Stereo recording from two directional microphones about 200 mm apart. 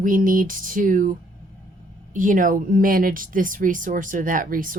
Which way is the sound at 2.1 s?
40° right (ahead or behind).